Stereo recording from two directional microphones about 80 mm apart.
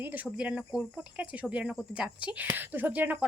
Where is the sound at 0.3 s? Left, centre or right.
Centre.